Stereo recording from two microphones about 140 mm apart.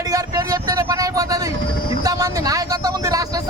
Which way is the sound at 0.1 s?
25° right (ahead or behind).